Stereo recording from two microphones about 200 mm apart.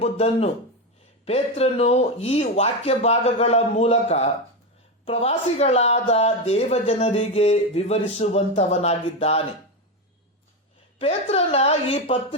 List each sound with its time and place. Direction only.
0.0 s speech: 30° left (ahead or behind)
10.9 s speech: 30° left (ahead or behind)